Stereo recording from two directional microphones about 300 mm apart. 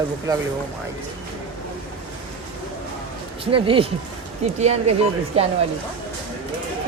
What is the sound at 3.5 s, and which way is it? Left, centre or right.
Speech, centre.